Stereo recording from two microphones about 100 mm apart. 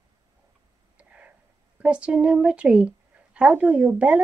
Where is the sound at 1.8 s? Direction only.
10° right (ahead or behind).